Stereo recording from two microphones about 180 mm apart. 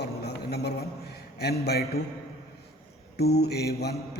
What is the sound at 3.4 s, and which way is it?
Speech, 65° left (ahead or behind).